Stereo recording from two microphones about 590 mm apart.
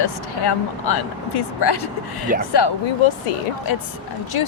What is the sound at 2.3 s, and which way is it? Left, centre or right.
Speech, centre.